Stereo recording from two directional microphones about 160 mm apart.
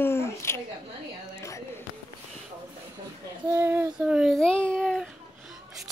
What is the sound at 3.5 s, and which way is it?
Child singing, 15° right (ahead or behind).